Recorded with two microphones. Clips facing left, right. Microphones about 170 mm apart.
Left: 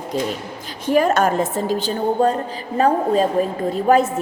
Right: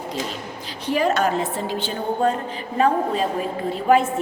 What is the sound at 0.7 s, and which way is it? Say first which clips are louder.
A woman's voice: left 4 dB; 45° left (ahead or behind).